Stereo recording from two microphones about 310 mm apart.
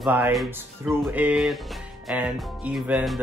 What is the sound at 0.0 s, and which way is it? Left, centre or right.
Speech, centre.